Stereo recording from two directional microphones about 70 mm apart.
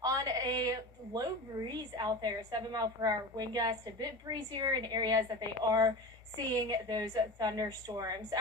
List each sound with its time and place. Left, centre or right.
0.0 s a woman's voice: right
6.5 s a woman's voice: right